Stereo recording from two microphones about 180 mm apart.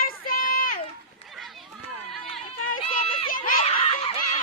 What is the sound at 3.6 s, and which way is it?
Snicker, 30° left (ahead or behind).